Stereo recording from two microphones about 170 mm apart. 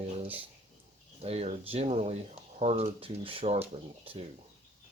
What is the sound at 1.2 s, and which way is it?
Speech, 40° right (ahead or behind).